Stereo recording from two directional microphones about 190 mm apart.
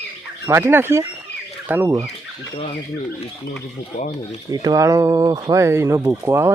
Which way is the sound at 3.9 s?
40° left (ahead or behind).